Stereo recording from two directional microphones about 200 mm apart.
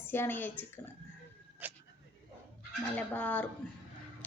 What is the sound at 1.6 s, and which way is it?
Speech, 10° right (ahead or behind).